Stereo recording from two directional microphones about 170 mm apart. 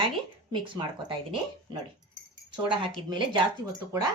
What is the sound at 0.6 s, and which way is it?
Speech, 30° right (ahead or behind).